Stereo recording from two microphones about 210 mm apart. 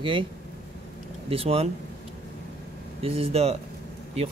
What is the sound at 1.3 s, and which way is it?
Speech, 30° right (ahead or behind).